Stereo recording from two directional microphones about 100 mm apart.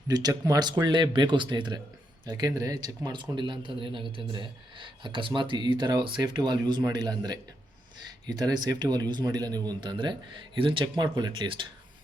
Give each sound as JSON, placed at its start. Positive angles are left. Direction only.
{"t": 0.1, "sound": "speech", "side_deg": -45}